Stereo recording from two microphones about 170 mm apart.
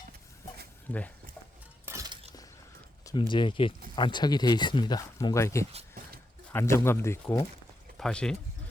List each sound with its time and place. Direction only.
0.9 s speech: 10° left (ahead or behind)
1.8 s shatter: 15° right (ahead or behind)
3.0 s speech: 25° left (ahead or behind); by 8.4 s 5° left (ahead or behind)